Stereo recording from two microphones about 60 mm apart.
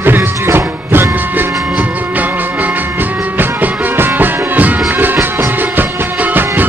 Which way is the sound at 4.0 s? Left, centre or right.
Right.